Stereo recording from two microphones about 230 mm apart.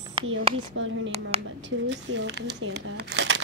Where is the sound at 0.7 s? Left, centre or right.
Right.